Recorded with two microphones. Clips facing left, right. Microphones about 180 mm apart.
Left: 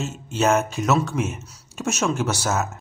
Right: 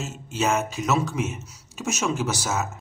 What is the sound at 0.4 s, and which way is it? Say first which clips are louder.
A man's voice: left 4 dB; centre (ahead or behind).